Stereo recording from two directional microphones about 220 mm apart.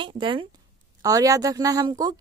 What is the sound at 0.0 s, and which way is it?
A woman's voice, 20° right (ahead or behind).